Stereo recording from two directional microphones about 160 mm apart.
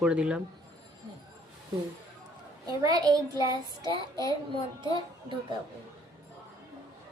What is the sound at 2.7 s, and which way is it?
Speech, 25° right (ahead or behind).